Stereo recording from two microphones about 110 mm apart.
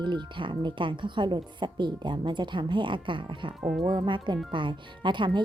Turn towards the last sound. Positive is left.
turn(degrees=-45)  # may be behind; listen again after turning